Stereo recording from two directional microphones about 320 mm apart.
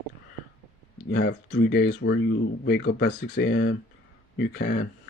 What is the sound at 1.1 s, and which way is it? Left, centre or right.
Speech, left.